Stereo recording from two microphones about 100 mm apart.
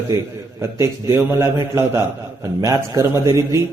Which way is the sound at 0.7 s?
25° right (ahead or behind).